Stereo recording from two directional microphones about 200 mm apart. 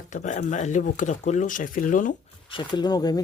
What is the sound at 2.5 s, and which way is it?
Speech, 20° left (ahead or behind).